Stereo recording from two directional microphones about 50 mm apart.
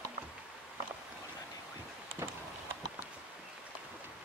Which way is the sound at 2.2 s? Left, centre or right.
Right.